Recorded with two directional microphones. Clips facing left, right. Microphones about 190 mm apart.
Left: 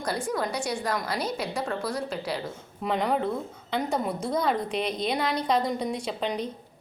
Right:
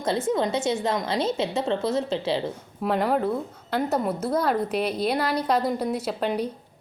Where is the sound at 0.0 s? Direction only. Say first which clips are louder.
Right 5 dB; 25° right (ahead or behind).